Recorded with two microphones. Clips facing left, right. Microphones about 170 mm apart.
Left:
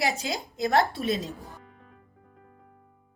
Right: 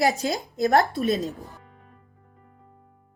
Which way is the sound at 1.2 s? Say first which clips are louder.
Right 6 dB; centre (ahead or behind).